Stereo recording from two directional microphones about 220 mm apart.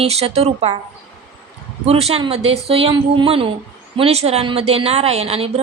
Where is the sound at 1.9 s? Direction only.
25° right (ahead or behind).